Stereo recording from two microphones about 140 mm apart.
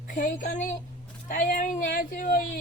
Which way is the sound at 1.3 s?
80° left.